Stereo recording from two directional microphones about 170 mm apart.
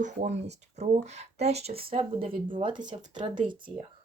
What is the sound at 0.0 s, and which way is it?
Speech, 40° right (ahead or behind).